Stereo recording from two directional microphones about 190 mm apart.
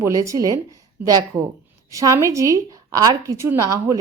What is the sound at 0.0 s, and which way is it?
A woman's voice, 15° right (ahead or behind).